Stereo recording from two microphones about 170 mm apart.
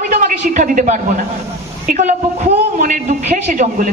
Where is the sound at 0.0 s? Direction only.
50° right (ahead or behind).